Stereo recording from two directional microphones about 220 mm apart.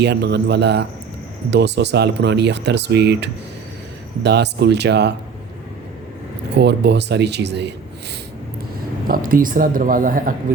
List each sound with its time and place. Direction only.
0.0 s speech: 50° right (ahead or behind)
6.5 s speech: 50° right (ahead or behind)
9.0 s speech: 40° right (ahead or behind)